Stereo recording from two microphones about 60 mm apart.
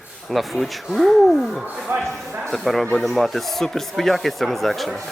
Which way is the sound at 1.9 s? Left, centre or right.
Right.